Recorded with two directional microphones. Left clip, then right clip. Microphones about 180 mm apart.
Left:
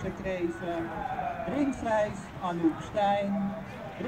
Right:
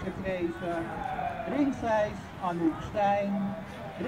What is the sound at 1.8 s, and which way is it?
Speech, 40° right (ahead or behind).